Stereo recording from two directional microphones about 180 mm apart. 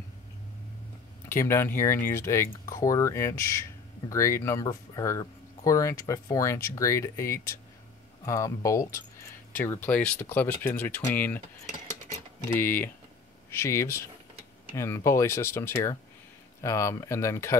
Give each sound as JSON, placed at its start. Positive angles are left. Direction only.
{"t": 1.3, "sound": "speech", "side_deg": 15}
{"t": 12.5, "sound": "speech", "side_deg": 10}